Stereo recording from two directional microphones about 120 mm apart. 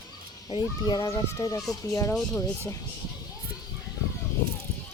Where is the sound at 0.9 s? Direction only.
35° left (ahead or behind).